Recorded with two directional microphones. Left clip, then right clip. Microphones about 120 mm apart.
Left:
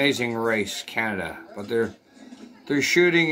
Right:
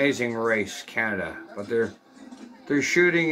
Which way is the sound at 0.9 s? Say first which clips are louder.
Right 1 dB; 40° left (ahead or behind).